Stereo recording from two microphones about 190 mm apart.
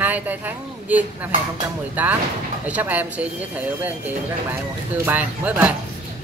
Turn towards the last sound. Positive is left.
turn(degrees=-10)  # may be behind; listen again after turning